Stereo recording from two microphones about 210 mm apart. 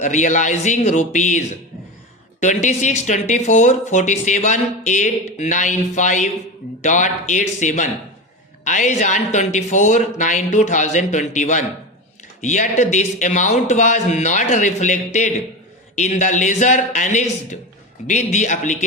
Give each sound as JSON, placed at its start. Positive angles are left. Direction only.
{"t": 0.0, "sound": "speech", "side_deg": 35}